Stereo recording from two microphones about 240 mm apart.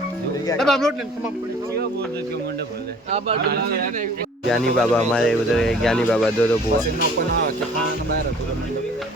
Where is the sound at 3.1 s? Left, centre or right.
Right.